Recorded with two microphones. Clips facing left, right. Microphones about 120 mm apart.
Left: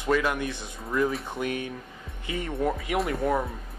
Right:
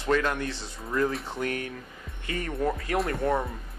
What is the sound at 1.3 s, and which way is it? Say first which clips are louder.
Speech: left 1 dB; 15° left (ahead or behind).